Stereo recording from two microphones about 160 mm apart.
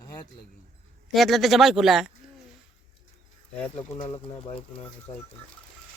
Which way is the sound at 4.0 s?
30° left (ahead or behind).